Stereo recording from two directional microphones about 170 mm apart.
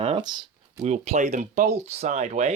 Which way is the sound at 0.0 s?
30° right (ahead or behind).